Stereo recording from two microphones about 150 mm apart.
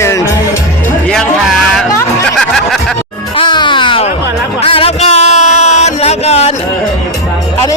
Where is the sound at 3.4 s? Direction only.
30° left (ahead or behind).